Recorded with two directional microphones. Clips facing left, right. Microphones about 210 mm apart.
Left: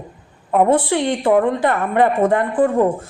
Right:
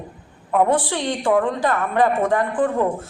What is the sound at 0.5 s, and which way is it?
A man's voice, 25° left (ahead or behind).